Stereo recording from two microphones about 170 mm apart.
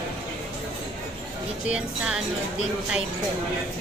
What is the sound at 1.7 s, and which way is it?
Speech, 5° right (ahead or behind).